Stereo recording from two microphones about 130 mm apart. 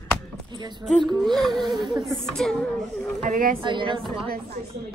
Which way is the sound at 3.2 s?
85° right.